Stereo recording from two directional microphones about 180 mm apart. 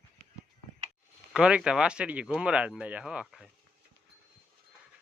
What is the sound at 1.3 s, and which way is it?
Speech, 5° right (ahead or behind).